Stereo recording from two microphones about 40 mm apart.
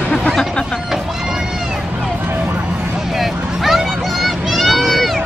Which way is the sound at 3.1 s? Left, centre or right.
Centre.